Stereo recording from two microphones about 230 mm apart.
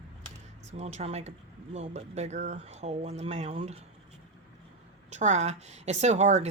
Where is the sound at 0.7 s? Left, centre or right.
Right.